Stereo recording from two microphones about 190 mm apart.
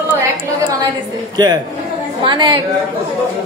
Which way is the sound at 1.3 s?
20° right (ahead or behind).